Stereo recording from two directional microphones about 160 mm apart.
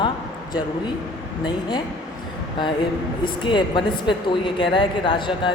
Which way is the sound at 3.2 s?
30° left (ahead or behind).